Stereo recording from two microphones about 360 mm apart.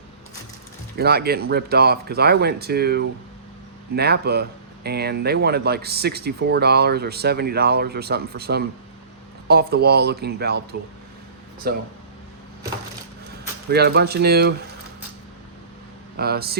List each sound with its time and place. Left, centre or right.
0.9 s speech: right
13.7 s speech: right
16.1 s speech: right